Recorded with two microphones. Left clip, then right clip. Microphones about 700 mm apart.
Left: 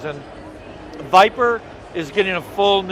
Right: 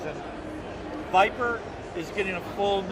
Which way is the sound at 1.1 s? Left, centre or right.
Left.